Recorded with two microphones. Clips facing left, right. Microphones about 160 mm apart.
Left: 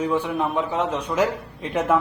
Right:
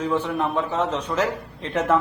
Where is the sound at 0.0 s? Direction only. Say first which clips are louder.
Left 1 dB; 10° left (ahead or behind).